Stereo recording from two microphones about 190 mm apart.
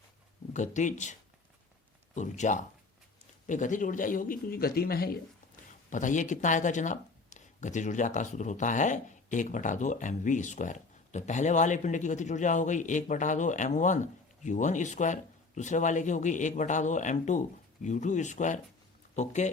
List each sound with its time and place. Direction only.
0.5 s speech: 40° left (ahead or behind)
2.1 s speech: 40° left (ahead or behind)
5.9 s speech: 40° left (ahead or behind)